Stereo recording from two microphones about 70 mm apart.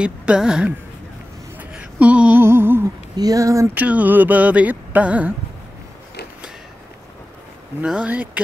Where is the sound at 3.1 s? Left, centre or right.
Right.